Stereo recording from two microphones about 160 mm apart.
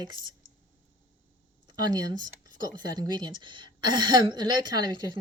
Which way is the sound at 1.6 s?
25° right (ahead or behind).